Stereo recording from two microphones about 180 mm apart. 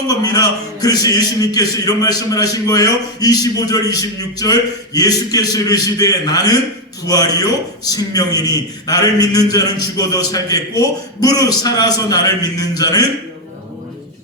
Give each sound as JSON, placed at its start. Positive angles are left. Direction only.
{"t": 0.1, "sound": "a man's voice", "side_deg": 20}